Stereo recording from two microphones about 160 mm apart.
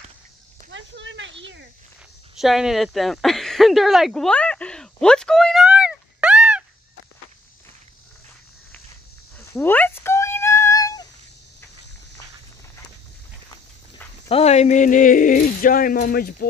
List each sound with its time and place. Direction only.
1.1 s a sound: 90° right
2.3 s speech: centre (ahead or behind)
9.4 s cat: 15° left (ahead or behind)
14.3 s speech: 40° left (ahead or behind); by 16.4 s 65° left (ahead or behind)